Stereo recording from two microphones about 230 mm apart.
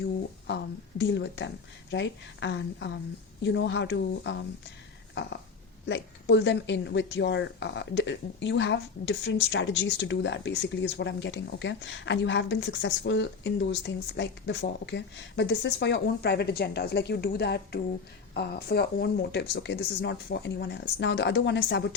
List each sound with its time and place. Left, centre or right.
0.0 s speech: left